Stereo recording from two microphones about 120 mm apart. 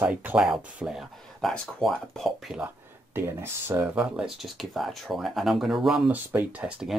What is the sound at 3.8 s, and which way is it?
Speech, 10° right (ahead or behind).